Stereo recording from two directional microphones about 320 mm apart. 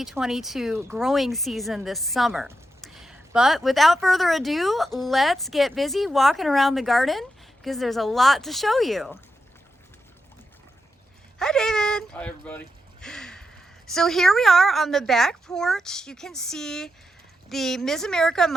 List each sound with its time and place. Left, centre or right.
0.0 s speech: centre
11.3 s speech: centre